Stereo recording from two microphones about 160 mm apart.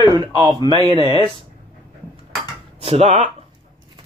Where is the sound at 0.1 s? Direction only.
25° right (ahead or behind).